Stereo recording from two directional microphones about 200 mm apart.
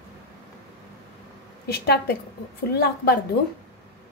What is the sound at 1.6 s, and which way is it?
A woman's voice, 55° left (ahead or behind).